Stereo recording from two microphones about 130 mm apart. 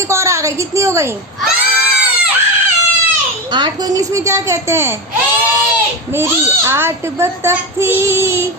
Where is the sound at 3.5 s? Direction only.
35° right (ahead or behind).